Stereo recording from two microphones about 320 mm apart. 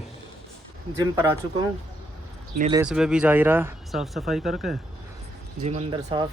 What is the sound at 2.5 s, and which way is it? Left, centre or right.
Speech, centre.